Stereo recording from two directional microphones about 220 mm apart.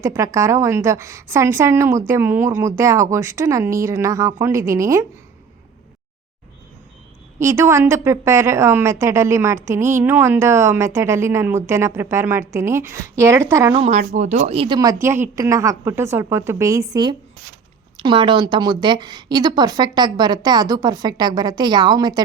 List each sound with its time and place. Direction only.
0.0 s a woman's voice: 15° right (ahead or behind)
7.3 s a woman's voice: 15° right (ahead or behind)
13.7 s a woman's voice: 25° right (ahead or behind)